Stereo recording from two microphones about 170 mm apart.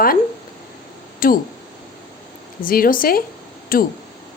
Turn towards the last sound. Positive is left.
turn(degrees=55)  # may be behind; listen again after turning